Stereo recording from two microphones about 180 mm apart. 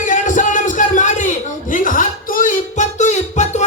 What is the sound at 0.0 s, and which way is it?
Music, 45° left (ahead or behind).